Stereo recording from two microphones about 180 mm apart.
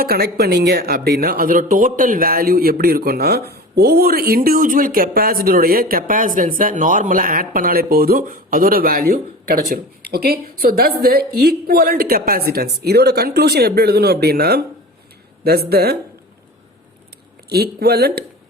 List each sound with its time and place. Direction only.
0.0 s speech: 60° right (ahead or behind)
17.5 s speech: 60° right (ahead or behind)